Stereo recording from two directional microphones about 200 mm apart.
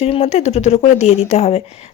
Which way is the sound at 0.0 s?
30° left (ahead or behind).